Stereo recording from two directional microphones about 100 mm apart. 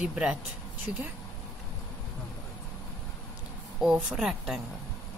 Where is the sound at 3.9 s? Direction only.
10° right (ahead or behind).